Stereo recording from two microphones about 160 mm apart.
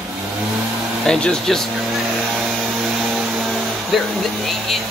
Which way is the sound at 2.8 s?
Centre (ahead or behind).